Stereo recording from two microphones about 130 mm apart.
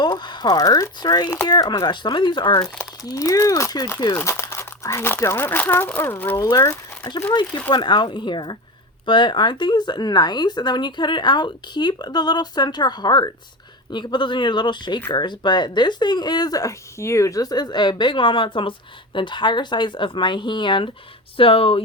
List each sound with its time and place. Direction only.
0.0 s speech: 35° left (ahead or behind)
3.0 s speech: 25° left (ahead or behind)
7.7 s speech: 35° left (ahead or behind)